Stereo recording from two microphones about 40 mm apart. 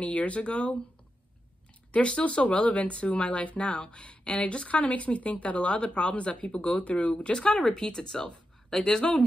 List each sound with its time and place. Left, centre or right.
0.0 s speech: left
1.9 s speech: left